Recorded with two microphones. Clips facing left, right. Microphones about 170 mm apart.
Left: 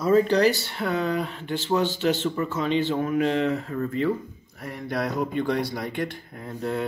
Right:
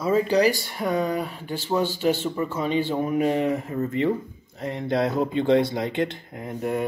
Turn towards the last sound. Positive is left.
turn(degrees=-15)  # may be behind; listen again after turning